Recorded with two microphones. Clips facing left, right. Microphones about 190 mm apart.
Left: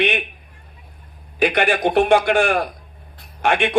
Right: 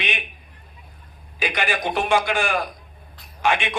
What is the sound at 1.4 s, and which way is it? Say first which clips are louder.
A man's voice: left 7 dB; 60° left (ahead or behind).